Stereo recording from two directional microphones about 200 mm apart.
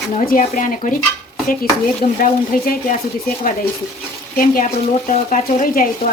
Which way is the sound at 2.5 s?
45° left (ahead or behind).